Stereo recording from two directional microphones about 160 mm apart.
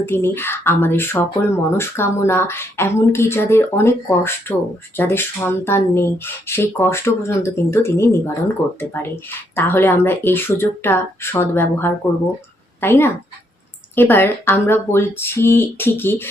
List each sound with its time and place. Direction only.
0.0 s a woman's voice: 15° left (ahead or behind)